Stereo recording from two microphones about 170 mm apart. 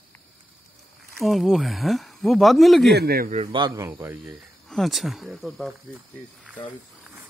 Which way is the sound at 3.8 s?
15° right (ahead or behind).